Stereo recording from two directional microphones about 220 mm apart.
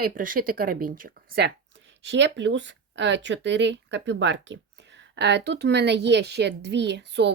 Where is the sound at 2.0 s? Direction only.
55° right (ahead or behind).